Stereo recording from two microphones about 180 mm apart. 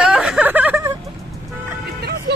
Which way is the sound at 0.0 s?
5° right (ahead or behind).